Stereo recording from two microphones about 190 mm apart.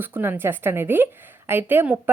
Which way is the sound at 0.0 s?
10° right (ahead or behind).